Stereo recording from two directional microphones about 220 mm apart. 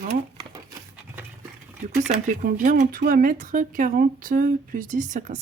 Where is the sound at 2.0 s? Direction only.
30° right (ahead or behind).